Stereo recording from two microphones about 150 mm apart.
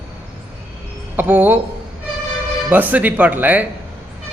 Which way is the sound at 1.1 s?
15° right (ahead or behind).